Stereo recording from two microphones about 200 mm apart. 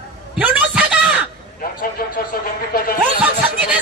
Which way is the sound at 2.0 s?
45° left (ahead or behind).